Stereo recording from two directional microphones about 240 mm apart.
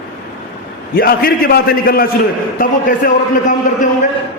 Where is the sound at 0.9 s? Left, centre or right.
Left.